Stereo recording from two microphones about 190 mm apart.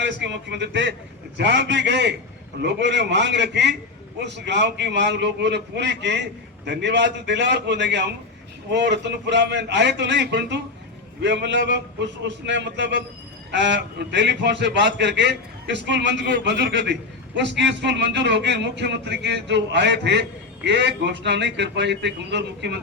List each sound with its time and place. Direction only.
0.0 s a man's voice: 65° right (ahead or behind)